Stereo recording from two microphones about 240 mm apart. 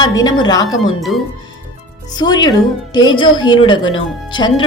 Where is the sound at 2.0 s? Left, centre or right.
Centre.